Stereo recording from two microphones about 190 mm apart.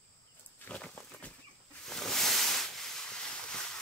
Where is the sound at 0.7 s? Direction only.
5° left (ahead or behind).